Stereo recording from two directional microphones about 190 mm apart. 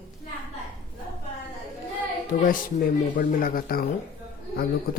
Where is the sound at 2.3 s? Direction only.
40° left (ahead or behind).